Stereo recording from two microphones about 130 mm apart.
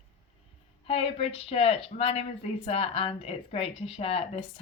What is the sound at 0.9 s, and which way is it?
A woman's voice, 50° left (ahead or behind).